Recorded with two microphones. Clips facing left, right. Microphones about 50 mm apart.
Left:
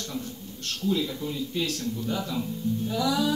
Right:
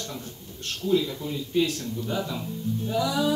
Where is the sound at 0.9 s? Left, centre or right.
Centre.